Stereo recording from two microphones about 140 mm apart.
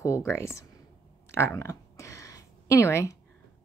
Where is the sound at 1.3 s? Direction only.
15° left (ahead or behind).